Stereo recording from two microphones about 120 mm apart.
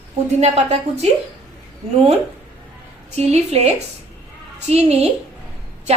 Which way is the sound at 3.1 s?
60° right (ahead or behind).